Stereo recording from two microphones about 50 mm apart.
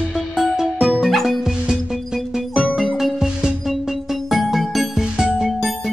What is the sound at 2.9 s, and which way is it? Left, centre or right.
Music, centre.